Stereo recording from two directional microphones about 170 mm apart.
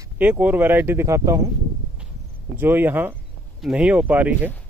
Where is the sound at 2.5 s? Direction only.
10° right (ahead or behind).